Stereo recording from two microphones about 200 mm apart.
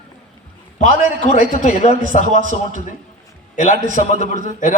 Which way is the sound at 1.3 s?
40° left (ahead or behind).